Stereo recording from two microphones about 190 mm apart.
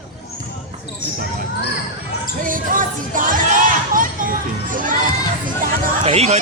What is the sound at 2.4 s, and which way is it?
Speech, 45° right (ahead or behind).